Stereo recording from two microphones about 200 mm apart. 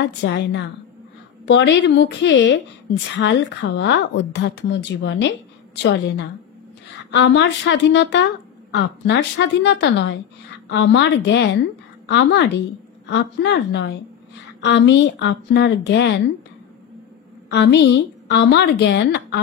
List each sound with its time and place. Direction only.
0.2 s a woman's voice: 60° left (ahead or behind)
17.5 s a woman's voice: 60° left (ahead or behind)